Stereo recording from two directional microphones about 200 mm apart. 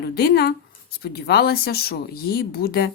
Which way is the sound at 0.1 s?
55° left (ahead or behind).